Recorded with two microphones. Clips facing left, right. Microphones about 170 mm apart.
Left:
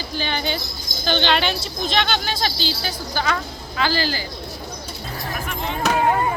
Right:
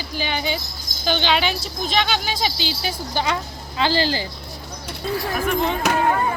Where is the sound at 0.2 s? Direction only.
5° right (ahead or behind); by 4.2 s 25° right (ahead or behind).